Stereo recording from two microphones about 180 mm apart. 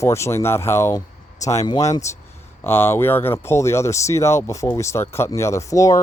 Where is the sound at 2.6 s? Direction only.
15° left (ahead or behind).